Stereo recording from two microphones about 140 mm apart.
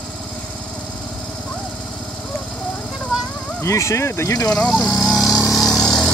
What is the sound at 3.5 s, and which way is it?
Speech, 20° left (ahead or behind).